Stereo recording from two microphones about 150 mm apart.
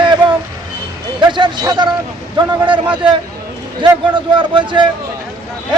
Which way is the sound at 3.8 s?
30° right (ahead or behind).